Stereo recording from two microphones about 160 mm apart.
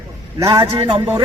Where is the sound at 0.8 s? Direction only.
35° right (ahead or behind).